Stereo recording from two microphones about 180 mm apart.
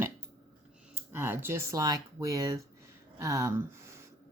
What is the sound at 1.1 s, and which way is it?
Speech, 10° right (ahead or behind).